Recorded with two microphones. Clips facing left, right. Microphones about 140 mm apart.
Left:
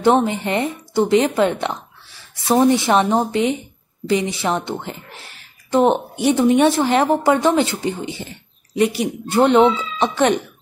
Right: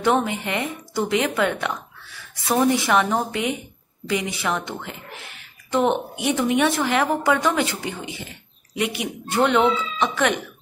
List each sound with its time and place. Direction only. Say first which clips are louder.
0.0 s a woman's voice: left 5 dB; 30° left (ahead or behind)